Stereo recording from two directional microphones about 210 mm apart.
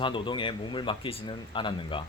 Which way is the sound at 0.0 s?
25° left (ahead or behind).